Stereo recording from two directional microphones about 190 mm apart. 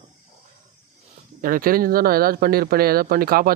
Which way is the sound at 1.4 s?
50° right (ahead or behind).